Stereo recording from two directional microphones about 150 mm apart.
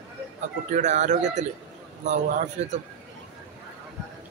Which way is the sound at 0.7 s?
50° right (ahead or behind).